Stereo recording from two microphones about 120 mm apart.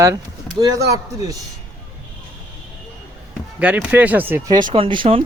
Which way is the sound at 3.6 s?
10° right (ahead or behind).